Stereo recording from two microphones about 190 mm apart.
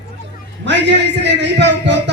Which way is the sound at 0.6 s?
65° right (ahead or behind).